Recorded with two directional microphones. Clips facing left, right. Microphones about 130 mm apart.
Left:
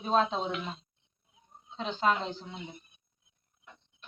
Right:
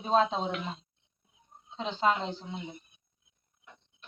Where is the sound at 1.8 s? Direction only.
25° right (ahead or behind).